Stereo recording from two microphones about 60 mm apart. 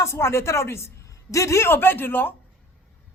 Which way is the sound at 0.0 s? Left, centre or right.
Left.